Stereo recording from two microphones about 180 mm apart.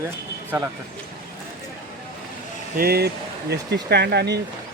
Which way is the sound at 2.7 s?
60° right (ahead or behind).